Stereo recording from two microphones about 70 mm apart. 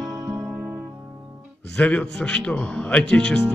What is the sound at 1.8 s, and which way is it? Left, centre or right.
Speech, centre.